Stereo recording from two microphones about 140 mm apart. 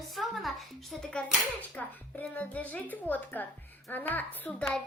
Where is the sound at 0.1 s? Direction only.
Centre (ahead or behind).